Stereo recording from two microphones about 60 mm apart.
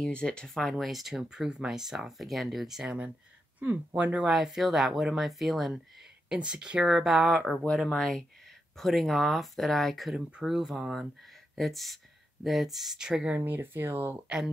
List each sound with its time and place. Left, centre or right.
0.0 s speech: centre
0.7 s speech: centre
3.5 s speech: right
4.3 s speech: centre
6.2 s speech: centre
13.5 s speech: right